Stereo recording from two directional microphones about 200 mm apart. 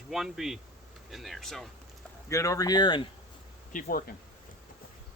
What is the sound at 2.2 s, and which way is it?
Speech, 15° left (ahead or behind).